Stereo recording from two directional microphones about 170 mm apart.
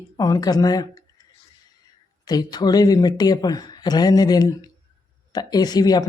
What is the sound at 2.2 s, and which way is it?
Speech, 25° left (ahead or behind).